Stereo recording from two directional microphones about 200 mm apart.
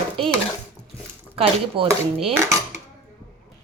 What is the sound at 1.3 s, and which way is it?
A woman's voice, 30° right (ahead or behind).